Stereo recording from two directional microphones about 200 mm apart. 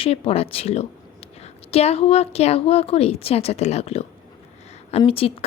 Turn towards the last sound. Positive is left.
turn(degrees=30)  # may be behind; listen again after turning